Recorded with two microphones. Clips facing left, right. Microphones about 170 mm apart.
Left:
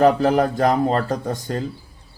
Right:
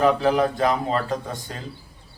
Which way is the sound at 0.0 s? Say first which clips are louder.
Left 3 dB; 45° left (ahead or behind).